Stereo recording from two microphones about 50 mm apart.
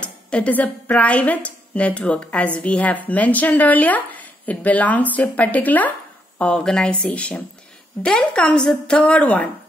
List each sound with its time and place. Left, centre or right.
0.0 s a woman's voice: left
6.3 s speech: left
6.6 s speech: centre
9.0 s speech: left